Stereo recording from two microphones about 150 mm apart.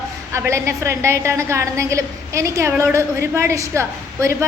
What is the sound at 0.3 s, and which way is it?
A woman's voice, 20° right (ahead or behind).